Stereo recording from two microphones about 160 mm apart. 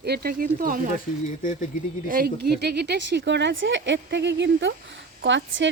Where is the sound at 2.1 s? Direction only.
75° right (ahead or behind).